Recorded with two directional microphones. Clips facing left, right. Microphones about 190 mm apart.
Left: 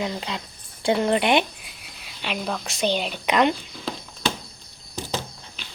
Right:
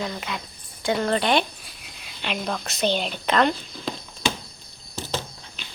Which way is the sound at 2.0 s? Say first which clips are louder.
Even; 5° left (ahead or behind).